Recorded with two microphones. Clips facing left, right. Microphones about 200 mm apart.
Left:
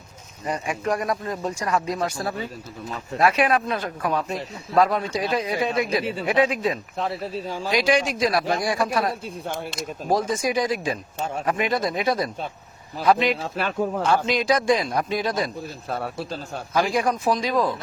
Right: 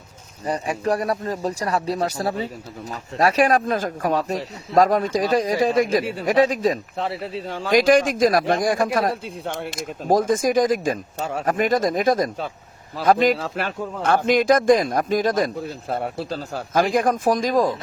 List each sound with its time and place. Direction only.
0.4 s speech: 35° right (ahead or behind)
7.5 s a man's voice: 55° right (ahead or behind)
15.9 s speech: 25° right (ahead or behind)
16.7 s a man's voice: 50° right (ahead or behind)